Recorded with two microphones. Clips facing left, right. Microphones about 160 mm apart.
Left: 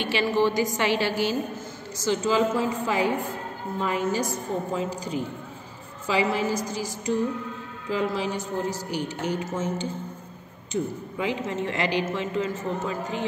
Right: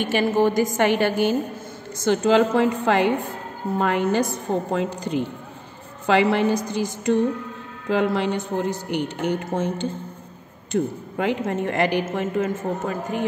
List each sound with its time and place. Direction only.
0.0 s a woman's voice: 50° right (ahead or behind)